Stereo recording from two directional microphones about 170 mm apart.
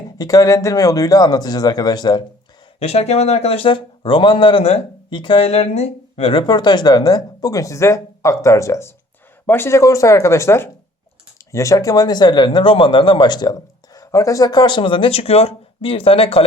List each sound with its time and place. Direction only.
0.2 s a man's voice: 20° left (ahead or behind)
2.7 s a man's voice: 35° left (ahead or behind)